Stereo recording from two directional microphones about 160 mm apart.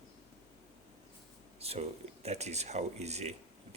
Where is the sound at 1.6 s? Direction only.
40° right (ahead or behind).